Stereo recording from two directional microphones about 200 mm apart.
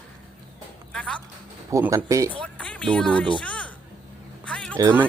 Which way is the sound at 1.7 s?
10° right (ahead or behind).